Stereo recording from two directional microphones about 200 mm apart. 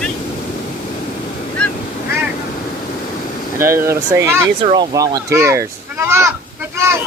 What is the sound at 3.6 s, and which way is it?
Speech, 15° right (ahead or behind).